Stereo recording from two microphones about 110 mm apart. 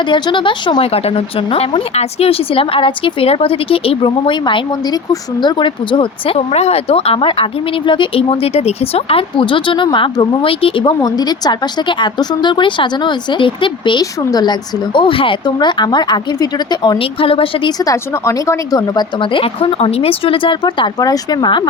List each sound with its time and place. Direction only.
0.1 s speech: 45° left (ahead or behind)
11.0 s speech: 40° left (ahead or behind)
14.0 s speech: 35° left (ahead or behind)
14.9 s speech: 50° left (ahead or behind)
15.4 s speech: 40° left (ahead or behind)
17.0 s speech: 55° left (ahead or behind)
17.7 s speech: 30° left (ahead or behind)
19.2 s speech: 50° left (ahead or behind)